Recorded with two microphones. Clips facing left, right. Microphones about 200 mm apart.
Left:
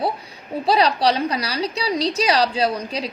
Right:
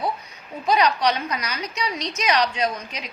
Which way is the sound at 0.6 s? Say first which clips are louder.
Left 2 dB; 35° left (ahead or behind).